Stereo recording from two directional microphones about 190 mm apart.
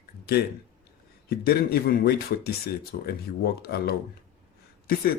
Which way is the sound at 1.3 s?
55° left (ahead or behind).